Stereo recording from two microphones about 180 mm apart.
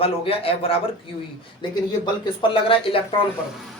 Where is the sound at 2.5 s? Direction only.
30° left (ahead or behind).